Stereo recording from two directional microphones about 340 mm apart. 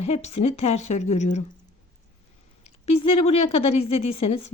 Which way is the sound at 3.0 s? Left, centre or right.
Centre.